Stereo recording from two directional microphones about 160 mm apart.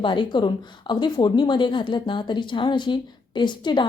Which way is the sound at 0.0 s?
30° left (ahead or behind).